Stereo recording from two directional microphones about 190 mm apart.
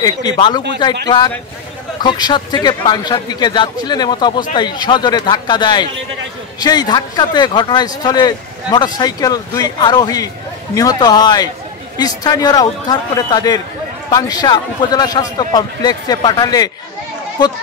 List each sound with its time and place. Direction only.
0.0 s a man's voice: 20° left (ahead or behind)